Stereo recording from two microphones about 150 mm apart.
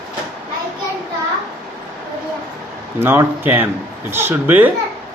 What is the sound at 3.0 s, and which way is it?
Speech, 15° right (ahead or behind).